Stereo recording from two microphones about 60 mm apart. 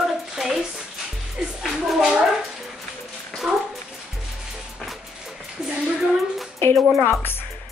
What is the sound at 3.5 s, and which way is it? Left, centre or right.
Speech, centre.